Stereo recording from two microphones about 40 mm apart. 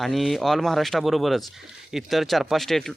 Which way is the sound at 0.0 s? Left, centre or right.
Centre.